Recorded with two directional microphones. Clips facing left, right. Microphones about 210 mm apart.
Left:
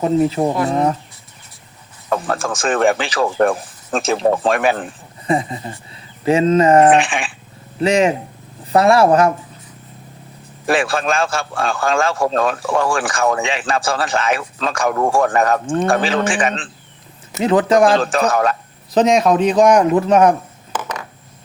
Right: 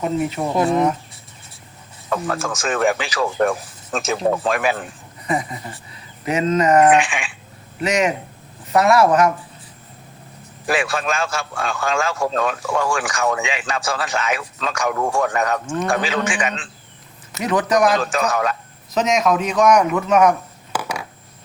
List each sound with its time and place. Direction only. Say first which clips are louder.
0.0 s a man's voice: left 6 dB; 30° left (ahead or behind)
2.0 s a man's voice: left 3 dB; 35° left (ahead or behind)
10.7 s a man's voice: left 4 dB; 30° left (ahead or behind); by 15.6 s 50° left (ahead or behind)
15.6 s a man's voice: left 5 dB; 30° left (ahead or behind)
20.7 s a sound: even; 10° right (ahead or behind)